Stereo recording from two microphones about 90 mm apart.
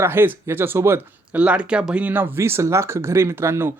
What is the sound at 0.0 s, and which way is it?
Speech, 25° right (ahead or behind).